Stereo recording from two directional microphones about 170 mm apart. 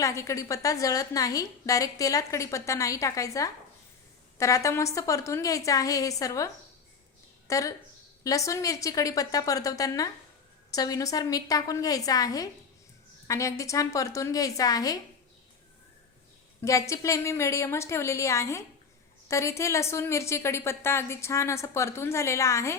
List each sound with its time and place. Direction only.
0.0 s a woman's voice: 15° left (ahead or behind)
16.6 s a woman's voice: 15° left (ahead or behind)